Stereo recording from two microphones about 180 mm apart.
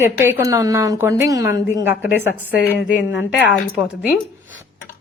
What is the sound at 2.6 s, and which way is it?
Speech, 70° left (ahead or behind).